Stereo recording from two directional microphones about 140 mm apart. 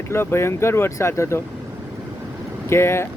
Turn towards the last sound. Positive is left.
turn(degrees=20)  # may be behind; listen again after turning